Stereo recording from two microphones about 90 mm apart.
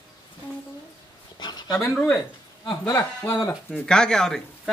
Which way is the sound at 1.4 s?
50° left (ahead or behind).